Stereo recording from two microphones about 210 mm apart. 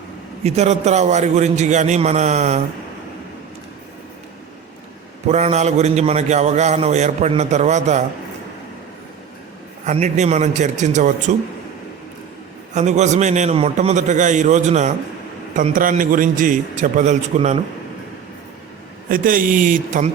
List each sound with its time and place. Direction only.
0.4 s a man's voice: 30° right (ahead or behind)
5.3 s a man's voice: 30° right (ahead or behind)
9.8 s a man's voice: 35° right (ahead or behind)
12.7 s a man's voice: 35° right (ahead or behind)
19.0 s a man's voice: 40° right (ahead or behind)